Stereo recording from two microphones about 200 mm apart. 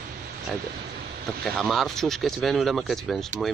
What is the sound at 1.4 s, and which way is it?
Speech, centre (ahead or behind).